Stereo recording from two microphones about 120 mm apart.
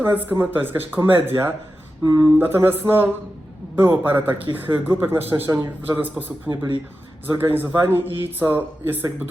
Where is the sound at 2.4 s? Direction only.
20° right (ahead or behind).